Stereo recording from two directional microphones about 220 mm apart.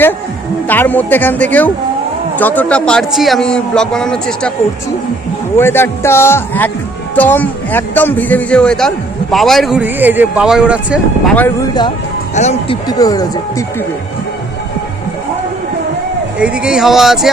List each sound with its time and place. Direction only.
0.7 s a man's voice: 10° left (ahead or behind)
5.5 s a man's voice: 10° left (ahead or behind)
11.3 s speech: 15° left (ahead or behind)
12.3 s speech: 30° left (ahead or behind)
12.9 s speech: 15° left (ahead or behind)
16.4 s a man's voice: 5° right (ahead or behind)